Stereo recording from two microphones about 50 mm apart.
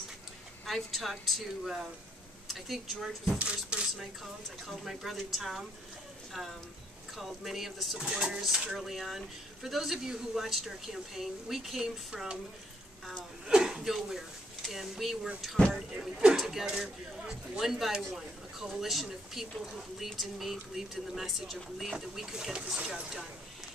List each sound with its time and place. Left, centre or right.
0.7 s speech: centre
3.3 s speech: right
4.6 s speech: centre
7.2 s speech: centre
8.7 s speech: centre
13.5 s speech: centre
16.0 s speech: centre